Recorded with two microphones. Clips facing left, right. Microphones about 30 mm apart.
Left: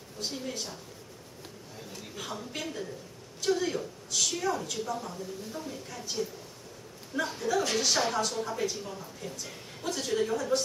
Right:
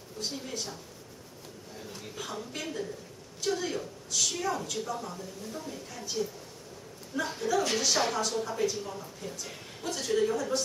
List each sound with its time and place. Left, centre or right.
0.3 s a woman's voice: centre
2.1 s a woman's voice: centre